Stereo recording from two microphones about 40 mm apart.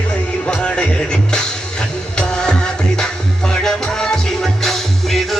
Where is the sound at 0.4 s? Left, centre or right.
Left.